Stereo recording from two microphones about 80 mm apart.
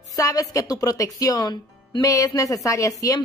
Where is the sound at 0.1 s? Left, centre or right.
Left.